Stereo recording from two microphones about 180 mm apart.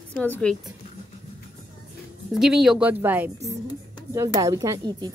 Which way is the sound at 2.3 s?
Centre (ahead or behind).